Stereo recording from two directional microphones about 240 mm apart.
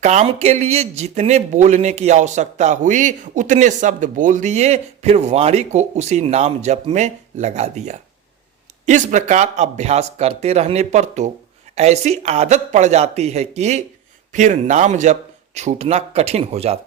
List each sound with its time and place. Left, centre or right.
0.0 s speech: right